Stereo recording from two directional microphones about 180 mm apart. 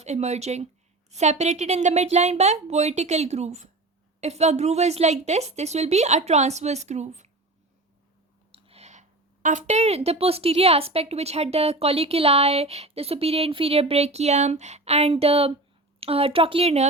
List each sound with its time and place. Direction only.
0.0 s a woman's voice: 40° right (ahead or behind)
8.5 s a woman's voice: 35° right (ahead or behind)